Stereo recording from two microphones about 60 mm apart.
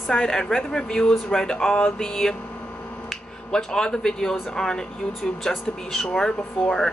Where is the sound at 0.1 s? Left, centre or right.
Centre.